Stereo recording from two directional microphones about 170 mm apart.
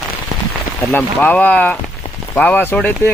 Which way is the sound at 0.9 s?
10° left (ahead or behind).